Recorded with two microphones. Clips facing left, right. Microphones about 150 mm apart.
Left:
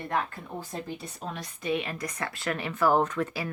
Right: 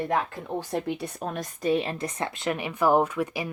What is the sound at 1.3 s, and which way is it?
Speech, 35° right (ahead or behind).